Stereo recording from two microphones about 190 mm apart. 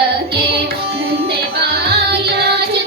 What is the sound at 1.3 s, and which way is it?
Music, 60° right (ahead or behind).